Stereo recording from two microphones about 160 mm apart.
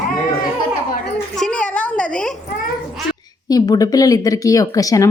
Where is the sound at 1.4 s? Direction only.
10° left (ahead or behind).